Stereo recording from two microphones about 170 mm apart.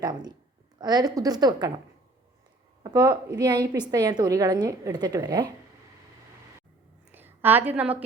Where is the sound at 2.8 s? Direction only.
20° right (ahead or behind).